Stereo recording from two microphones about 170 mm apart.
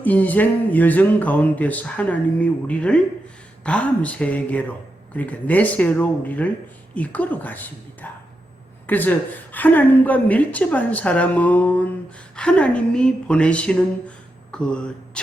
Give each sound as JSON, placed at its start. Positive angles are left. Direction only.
{"t": 0.0, "sound": "a woman's voice", "side_deg": 10}